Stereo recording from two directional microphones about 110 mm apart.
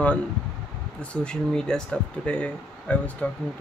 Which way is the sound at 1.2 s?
10° left (ahead or behind).